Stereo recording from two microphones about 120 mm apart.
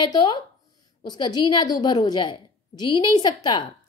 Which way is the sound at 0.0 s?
35° left (ahead or behind).